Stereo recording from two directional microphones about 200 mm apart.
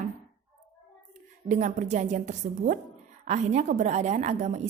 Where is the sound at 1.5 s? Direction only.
40° right (ahead or behind).